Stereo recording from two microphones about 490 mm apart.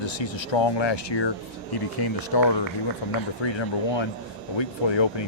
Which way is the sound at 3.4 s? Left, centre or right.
Left.